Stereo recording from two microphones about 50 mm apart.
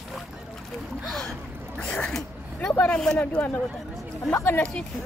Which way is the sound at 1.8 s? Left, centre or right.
Centre.